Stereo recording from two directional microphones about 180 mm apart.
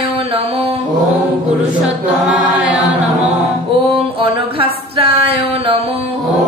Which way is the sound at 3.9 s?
30° right (ahead or behind).